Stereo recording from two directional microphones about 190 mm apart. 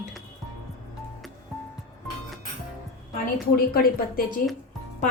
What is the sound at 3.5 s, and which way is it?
Speech, 50° left (ahead or behind).